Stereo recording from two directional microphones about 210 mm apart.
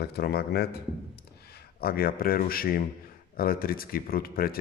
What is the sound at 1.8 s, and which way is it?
Speech, 45° left (ahead or behind).